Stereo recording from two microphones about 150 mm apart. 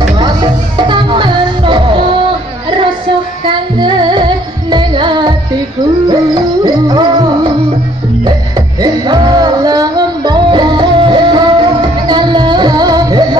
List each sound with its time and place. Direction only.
0.2 s music: 30° right (ahead or behind)
3.4 s music: 30° right (ahead or behind)
8.5 s music: 30° right (ahead or behind)